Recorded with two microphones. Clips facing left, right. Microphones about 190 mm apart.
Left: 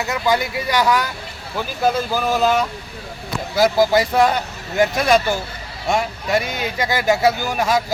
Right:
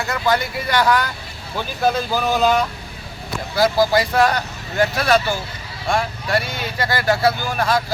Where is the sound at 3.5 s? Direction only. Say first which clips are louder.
Left 1 dB; 20° left (ahead or behind).